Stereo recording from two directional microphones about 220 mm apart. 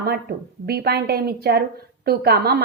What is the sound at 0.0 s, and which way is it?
A woman's voice, 45° right (ahead or behind).